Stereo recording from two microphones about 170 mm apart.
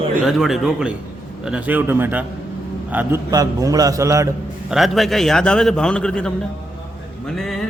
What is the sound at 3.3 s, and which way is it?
A man's voice, 20° right (ahead or behind).